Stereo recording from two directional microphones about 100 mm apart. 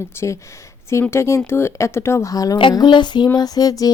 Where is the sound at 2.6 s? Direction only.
50° left (ahead or behind).